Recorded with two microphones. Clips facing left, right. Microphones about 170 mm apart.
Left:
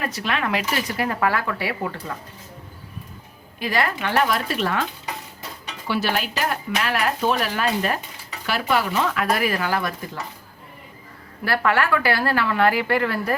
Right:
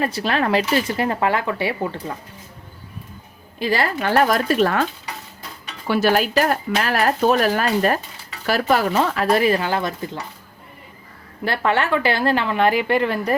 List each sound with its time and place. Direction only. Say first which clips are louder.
0.0 s a woman's voice: right 5 dB; 30° right (ahead or behind)
3.6 s speech: right 3 dB; 30° right (ahead or behind)
5.9 s speech: right 7 dB; 45° right (ahead or behind); by 9.9 s 25° right (ahead or behind)
11.4 s a woman's voice: right 1 dB; 25° right (ahead or behind)